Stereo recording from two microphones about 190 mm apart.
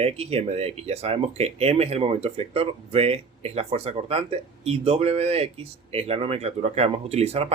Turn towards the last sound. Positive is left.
turn(degrees=-35)  # may be behind; listen again after turning